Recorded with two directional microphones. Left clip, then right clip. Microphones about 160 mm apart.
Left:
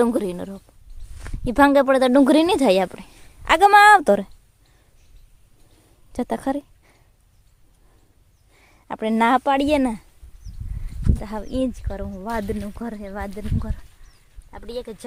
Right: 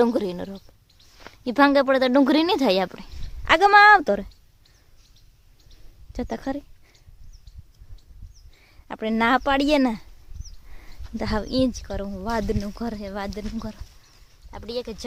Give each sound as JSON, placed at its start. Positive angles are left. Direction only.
{"t": 0.0, "sound": "speech", "side_deg": 5}
{"t": 6.1, "sound": "speech", "side_deg": 30}
{"t": 8.5, "sound": "a sound", "side_deg": 25}
{"t": 9.4, "sound": "speech", "side_deg": 10}
{"t": 11.4, "sound": "speech", "side_deg": -25}
{"t": 11.7, "sound": "speech", "side_deg": -10}